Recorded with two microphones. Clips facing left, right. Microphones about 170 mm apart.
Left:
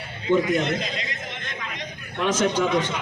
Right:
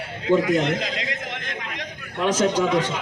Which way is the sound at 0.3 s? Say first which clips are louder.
Right 1 dB; 90° right.